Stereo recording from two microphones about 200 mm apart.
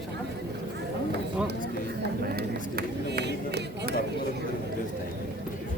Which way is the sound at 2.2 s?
50° right (ahead or behind).